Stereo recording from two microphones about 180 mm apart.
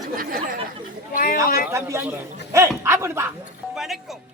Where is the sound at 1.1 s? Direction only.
50° left (ahead or behind).